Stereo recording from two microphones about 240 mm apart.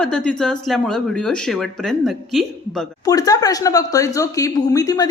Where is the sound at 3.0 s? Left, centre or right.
Centre.